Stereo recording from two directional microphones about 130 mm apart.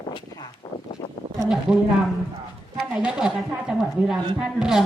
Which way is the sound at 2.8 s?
5° right (ahead or behind).